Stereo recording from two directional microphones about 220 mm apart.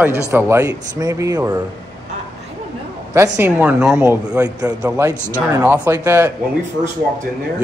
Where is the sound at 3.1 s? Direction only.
15° right (ahead or behind).